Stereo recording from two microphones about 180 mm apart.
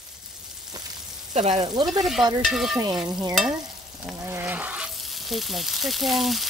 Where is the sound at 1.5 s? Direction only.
25° right (ahead or behind).